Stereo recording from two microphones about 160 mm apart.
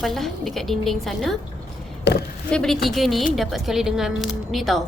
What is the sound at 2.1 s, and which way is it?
Speech, 90° left.